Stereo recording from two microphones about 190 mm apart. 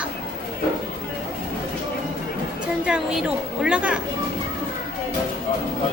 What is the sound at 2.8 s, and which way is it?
A woman's voice, 5° right (ahead or behind).